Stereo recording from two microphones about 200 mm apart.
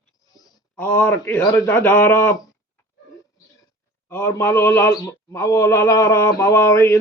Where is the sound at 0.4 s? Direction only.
10° left (ahead or behind).